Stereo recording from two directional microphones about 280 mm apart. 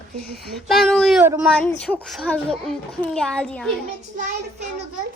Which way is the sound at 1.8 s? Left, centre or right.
Centre.